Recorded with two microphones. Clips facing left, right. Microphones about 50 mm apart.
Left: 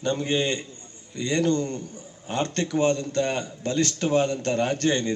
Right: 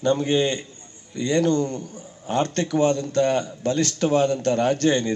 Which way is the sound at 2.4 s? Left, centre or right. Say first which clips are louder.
Right 3 dB; left.